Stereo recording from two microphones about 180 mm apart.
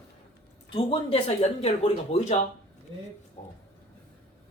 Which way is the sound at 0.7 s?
30° left (ahead or behind).